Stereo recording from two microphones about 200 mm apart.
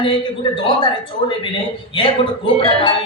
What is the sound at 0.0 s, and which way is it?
Speech, 25° left (ahead or behind).